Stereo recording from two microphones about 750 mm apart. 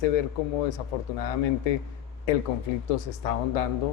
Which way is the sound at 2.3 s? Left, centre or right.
Left.